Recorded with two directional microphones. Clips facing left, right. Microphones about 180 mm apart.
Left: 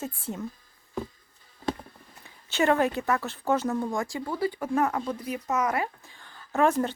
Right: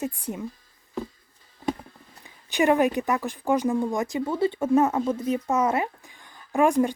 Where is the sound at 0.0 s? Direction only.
15° right (ahead or behind).